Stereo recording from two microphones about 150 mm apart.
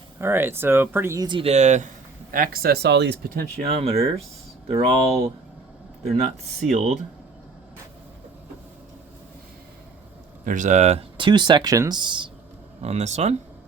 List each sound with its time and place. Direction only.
0.2 s speech: 15° right (ahead or behind)
1.3 s speech: 40° right (ahead or behind)
2.3 s speech: 75° right (ahead or behind); by 3.4 s 90° right
3.6 s speech: 40° right (ahead or behind)
6.6 s speech: 50° right (ahead or behind)
10.4 s speech: 60° right (ahead or behind)
11.2 s speech: 30° right (ahead or behind)
12.8 s speech: 50° right (ahead or behind)